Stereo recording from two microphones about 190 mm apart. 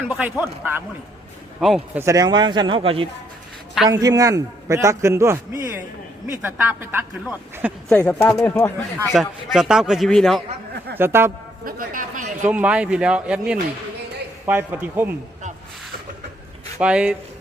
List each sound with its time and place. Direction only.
0.1 s a man's voice: 10° right (ahead or behind)
2.0 s a man's voice: 15° right (ahead or behind)
7.9 s a man's voice: 5° left (ahead or behind)
10.9 s a man's voice: 10° right (ahead or behind)
11.6 s speech: 45° right (ahead or behind)
12.5 s a man's voice: 5° right (ahead or behind)
16.7 s speech: 5° right (ahead or behind)